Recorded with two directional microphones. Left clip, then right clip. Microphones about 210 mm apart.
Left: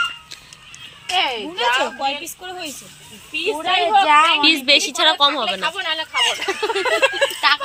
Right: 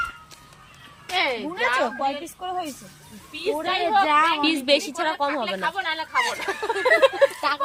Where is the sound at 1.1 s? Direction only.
25° left (ahead or behind).